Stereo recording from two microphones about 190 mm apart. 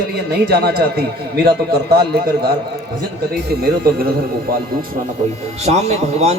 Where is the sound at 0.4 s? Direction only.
55° right (ahead or behind).